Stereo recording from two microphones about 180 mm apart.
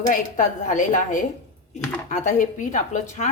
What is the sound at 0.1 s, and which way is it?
A woman's voice, 45° left (ahead or behind).